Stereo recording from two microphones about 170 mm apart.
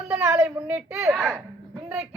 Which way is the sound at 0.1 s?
10° right (ahead or behind).